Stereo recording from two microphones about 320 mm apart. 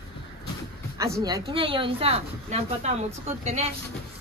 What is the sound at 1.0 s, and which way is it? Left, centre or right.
A woman's voice, centre.